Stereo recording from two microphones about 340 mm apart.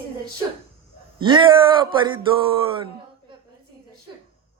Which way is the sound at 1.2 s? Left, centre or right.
Centre.